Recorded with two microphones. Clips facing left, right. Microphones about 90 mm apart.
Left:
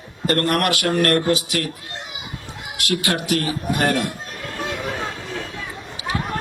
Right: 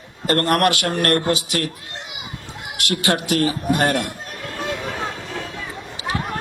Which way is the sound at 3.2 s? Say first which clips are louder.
Right 3 dB; 35° right (ahead or behind).